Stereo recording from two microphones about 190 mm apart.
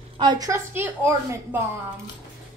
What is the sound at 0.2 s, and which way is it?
A woman's voice, 20° right (ahead or behind).